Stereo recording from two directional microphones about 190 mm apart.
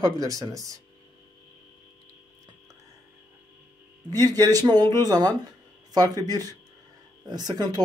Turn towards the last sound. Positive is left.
turn(degrees=-20)  # may be behind; listen again after turning